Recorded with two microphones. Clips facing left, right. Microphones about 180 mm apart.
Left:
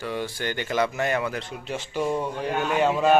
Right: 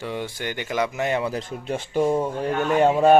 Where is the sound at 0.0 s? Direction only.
20° right (ahead or behind).